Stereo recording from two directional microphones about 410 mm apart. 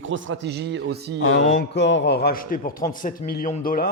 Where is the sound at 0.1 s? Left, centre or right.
Right.